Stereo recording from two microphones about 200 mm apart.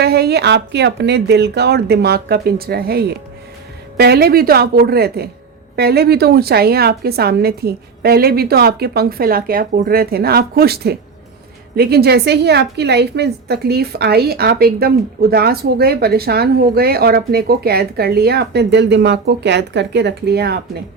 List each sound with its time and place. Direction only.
0.0 s a woman's voice: 55° right (ahead or behind)